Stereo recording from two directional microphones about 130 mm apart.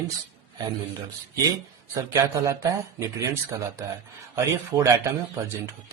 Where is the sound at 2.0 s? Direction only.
25° right (ahead or behind).